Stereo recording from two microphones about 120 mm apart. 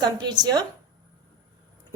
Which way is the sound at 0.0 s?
35° right (ahead or behind).